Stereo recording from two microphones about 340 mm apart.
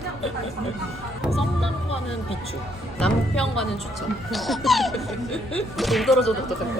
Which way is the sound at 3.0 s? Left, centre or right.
Centre.